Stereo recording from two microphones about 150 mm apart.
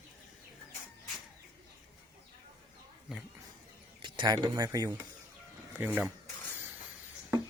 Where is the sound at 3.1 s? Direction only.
5° right (ahead or behind).